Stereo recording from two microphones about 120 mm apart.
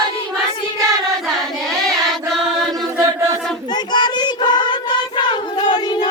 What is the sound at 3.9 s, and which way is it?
Child singing, 40° left (ahead or behind).